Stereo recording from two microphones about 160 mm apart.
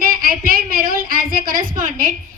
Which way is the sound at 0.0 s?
65° right (ahead or behind).